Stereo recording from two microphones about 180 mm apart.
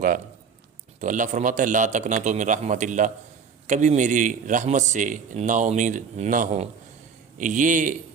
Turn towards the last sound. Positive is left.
turn(degrees=-45)  # may be behind; listen again after turning